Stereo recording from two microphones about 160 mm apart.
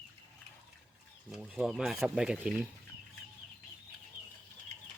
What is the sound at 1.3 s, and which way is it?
Speech, 5° right (ahead or behind).